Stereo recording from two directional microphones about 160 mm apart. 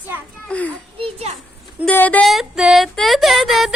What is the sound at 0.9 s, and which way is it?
Children playing, 35° right (ahead or behind).